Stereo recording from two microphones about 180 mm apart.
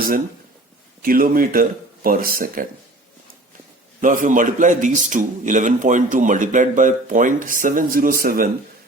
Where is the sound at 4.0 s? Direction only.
45° right (ahead or behind).